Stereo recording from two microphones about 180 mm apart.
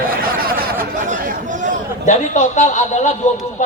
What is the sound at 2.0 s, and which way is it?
A man's voice, 45° left (ahead or behind).